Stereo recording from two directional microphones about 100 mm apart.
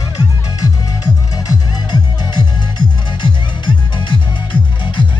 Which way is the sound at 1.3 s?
45° left (ahead or behind).